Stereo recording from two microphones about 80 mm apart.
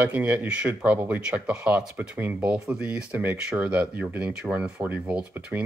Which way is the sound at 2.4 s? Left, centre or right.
Centre.